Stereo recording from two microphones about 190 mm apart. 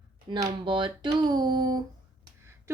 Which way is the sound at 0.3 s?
25° right (ahead or behind).